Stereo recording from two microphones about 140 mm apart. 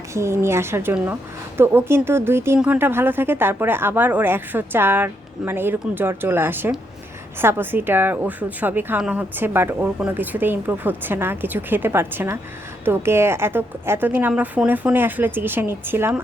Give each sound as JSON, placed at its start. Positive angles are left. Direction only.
{"t": 0.1, "sound": "a woman's voice", "side_deg": -20}